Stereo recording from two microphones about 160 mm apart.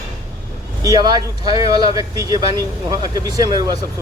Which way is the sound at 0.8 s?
25° right (ahead or behind).